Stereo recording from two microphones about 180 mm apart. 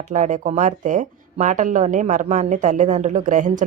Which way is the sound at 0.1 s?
45° right (ahead or behind).